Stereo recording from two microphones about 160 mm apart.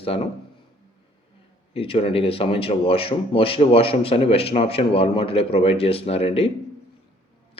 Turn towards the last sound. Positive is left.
turn(degrees=40)  # may be behind; listen again after turning